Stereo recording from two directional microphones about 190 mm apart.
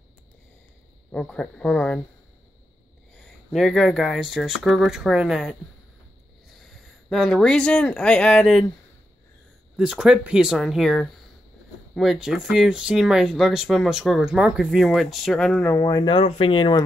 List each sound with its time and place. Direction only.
1.1 s speech: 5° left (ahead or behind)
3.2 s speech: centre (ahead or behind)
9.8 s speech: 5° right (ahead or behind)
15.8 s speech: 20° left (ahead or behind)